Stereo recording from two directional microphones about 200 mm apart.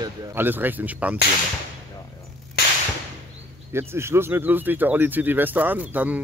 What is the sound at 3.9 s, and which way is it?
Speech, 10° right (ahead or behind).